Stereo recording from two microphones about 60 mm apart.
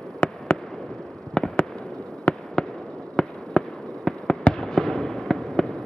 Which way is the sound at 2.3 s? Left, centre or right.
Left.